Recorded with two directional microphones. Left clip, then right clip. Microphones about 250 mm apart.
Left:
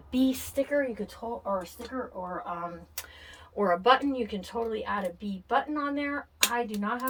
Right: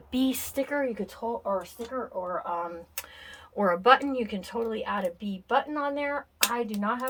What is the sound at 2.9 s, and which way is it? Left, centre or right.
Speech, centre.